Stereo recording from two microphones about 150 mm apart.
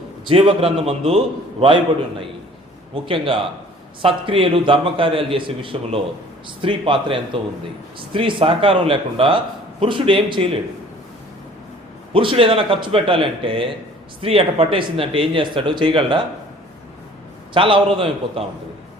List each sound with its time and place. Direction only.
0.3 s speech: 35° right (ahead or behind)
2.9 s speech: 35° right (ahead or behind)
12.1 s speech: 35° right (ahead or behind)
17.5 s speech: 35° right (ahead or behind)